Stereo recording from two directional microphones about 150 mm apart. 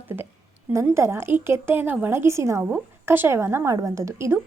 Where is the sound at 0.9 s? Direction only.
15° right (ahead or behind).